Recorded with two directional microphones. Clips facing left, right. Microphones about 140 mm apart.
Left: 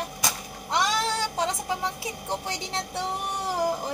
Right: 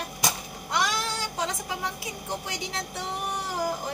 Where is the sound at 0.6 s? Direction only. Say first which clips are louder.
Left 3 dB; 25° left (ahead or behind).